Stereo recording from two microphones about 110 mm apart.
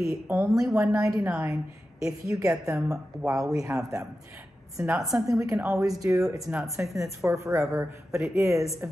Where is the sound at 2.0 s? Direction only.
30° right (ahead or behind).